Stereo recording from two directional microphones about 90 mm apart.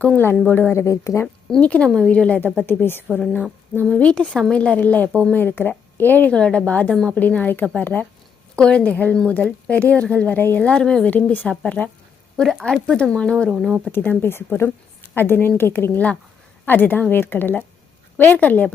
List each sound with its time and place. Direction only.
0.7 s speech: 30° left (ahead or behind)
1.5 s a woman's voice: 10° left (ahead or behind)
3.8 s a woman's voice: 10° left (ahead or behind)
7.2 s a woman's voice: 15° left (ahead or behind)
12.4 s a woman's voice: centre (ahead or behind)
13.5 s a woman's voice: 5° right (ahead or behind)
13.9 s a woman's voice: 25° left (ahead or behind)